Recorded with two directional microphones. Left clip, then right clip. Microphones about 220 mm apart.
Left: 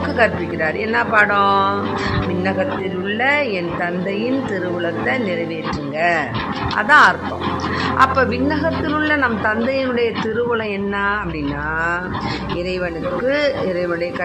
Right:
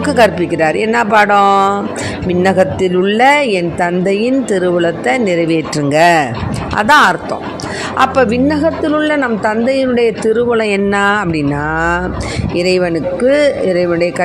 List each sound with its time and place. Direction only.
0.2 s a woman's voice: 35° right (ahead or behind)
2.4 s a woman's voice: 40° right (ahead or behind)
12.5 s a woman's voice: 40° right (ahead or behind)